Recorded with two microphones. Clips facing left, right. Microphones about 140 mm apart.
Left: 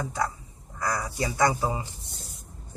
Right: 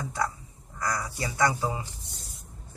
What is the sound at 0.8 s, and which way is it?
Speech, 25° left (ahead or behind).